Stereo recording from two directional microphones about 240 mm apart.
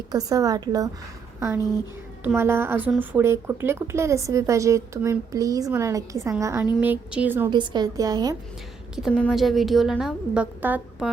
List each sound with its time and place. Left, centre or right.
0.1 s a woman's voice: centre
9.0 s a woman's voice: centre